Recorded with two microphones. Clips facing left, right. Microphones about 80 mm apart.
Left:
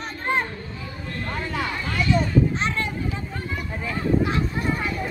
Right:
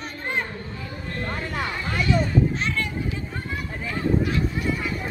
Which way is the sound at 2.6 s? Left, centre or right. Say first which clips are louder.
Left 1 dB; left.